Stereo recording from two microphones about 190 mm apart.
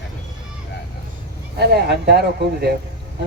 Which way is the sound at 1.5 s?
60° right (ahead or behind).